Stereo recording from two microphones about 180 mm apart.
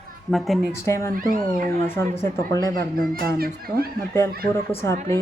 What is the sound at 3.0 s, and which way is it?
Speech, 55° right (ahead or behind).